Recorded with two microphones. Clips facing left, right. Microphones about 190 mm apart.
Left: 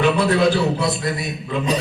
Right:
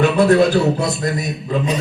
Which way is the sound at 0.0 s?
45° right (ahead or behind).